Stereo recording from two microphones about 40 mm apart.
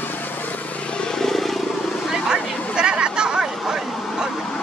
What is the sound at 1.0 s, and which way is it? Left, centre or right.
Vehicle, centre.